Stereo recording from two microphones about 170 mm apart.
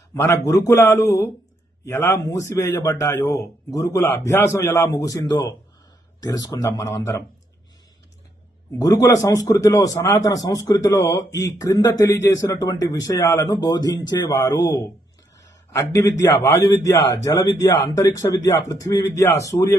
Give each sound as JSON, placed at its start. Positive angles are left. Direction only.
{"t": 0.1, "sound": "a man's voice", "side_deg": 20}
{"t": 8.8, "sound": "a man's voice", "side_deg": 20}